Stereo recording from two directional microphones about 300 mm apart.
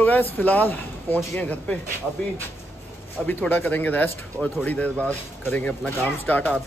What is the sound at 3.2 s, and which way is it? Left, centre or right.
Speech, centre.